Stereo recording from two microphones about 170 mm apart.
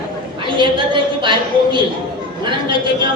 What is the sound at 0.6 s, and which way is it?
A woman's voice, 30° right (ahead or behind).